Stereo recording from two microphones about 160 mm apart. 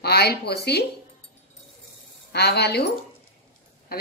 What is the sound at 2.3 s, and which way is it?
Speech, 90° left.